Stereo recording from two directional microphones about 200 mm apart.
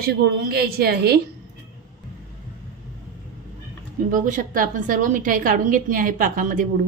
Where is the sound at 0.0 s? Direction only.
50° right (ahead or behind).